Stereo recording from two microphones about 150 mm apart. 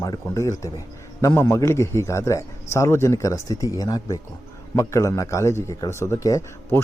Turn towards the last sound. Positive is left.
turn(degrees=20)  # may be behind; listen again after turning